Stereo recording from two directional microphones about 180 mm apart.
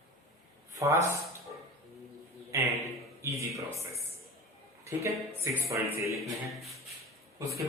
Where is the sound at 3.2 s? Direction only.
15° right (ahead or behind).